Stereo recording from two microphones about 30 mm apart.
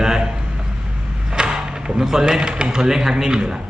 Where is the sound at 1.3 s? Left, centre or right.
Right.